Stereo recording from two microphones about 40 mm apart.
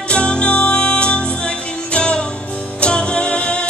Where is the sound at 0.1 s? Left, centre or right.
Left.